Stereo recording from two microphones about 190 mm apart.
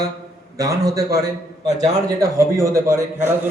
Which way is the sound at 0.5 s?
20° right (ahead or behind).